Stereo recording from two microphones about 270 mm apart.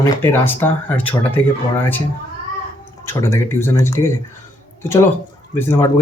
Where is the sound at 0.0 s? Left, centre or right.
Centre.